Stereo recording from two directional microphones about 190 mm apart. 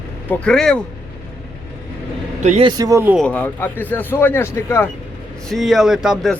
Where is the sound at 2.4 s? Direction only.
35° right (ahead or behind).